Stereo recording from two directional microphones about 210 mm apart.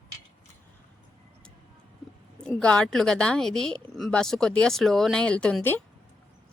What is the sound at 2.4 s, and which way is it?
A woman's voice, 5° left (ahead or behind).